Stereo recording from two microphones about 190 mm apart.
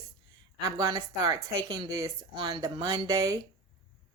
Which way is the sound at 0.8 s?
20° right (ahead or behind).